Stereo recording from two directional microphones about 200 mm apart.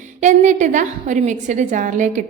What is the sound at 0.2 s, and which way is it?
A woman's voice, 40° right (ahead or behind).